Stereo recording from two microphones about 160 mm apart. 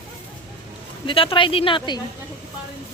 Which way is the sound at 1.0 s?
35° left (ahead or behind).